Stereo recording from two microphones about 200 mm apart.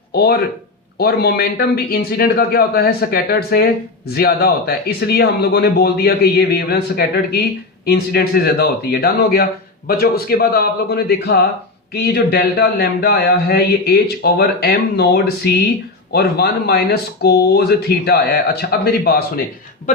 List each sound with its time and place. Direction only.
0.1 s speech: 55° left (ahead or behind)